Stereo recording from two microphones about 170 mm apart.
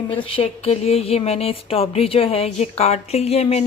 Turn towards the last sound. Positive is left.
turn(degrees=40)  # may be behind; listen again after turning